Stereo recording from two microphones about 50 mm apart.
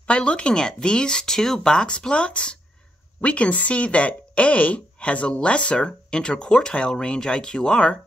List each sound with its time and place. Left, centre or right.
0.0 s a woman's voice: left